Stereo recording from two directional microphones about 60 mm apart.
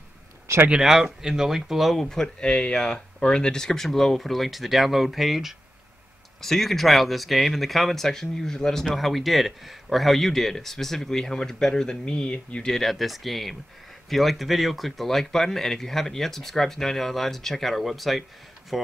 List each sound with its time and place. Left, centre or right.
0.5 s a sound: right
0.8 s speech: centre
2.0 s speech: centre
12.7 s speech: centre